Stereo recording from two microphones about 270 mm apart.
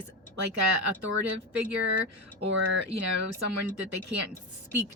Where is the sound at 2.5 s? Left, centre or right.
Right.